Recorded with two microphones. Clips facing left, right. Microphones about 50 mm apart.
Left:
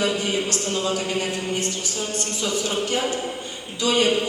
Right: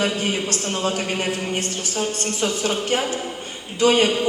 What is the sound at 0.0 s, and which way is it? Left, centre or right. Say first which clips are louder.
A man's voice: even; right.